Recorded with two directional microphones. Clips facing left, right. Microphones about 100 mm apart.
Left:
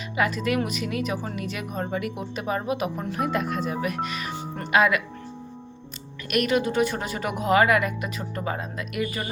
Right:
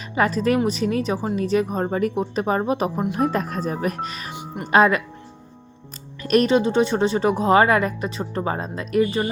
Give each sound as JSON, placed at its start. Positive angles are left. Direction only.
{"t": 0.2, "sound": "a woman's voice", "side_deg": -35}
{"t": 4.3, "sound": "music", "side_deg": -15}
{"t": 4.7, "sound": "a woman's voice", "side_deg": -35}
{"t": 6.2, "sound": "a woman's voice", "side_deg": -35}